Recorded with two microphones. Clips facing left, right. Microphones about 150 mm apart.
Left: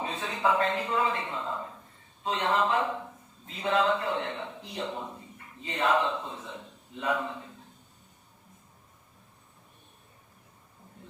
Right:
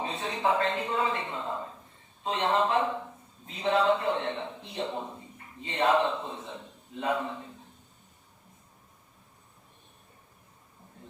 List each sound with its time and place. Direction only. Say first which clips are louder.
0.0 s a man's voice: even; 25° right (ahead or behind)